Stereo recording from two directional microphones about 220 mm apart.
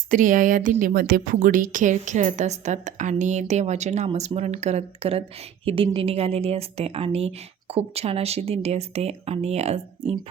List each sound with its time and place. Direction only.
0.1 s a woman's voice: 35° right (ahead or behind)